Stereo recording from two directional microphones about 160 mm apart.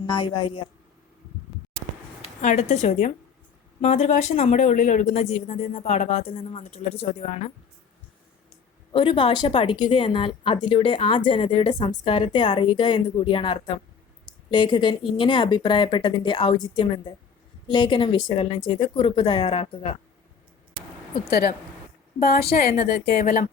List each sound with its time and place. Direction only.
0.0 s a woman's voice: 25° left (ahead or behind)
2.4 s speech: 50° left (ahead or behind)
8.9 s a woman's voice: 35° left (ahead or behind)
21.2 s a woman's voice: 75° left (ahead or behind); by 23.5 s 55° left (ahead or behind)